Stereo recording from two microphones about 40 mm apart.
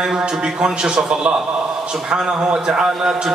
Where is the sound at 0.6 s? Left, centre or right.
Centre.